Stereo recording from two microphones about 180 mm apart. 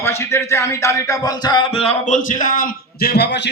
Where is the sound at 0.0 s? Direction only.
15° left (ahead or behind).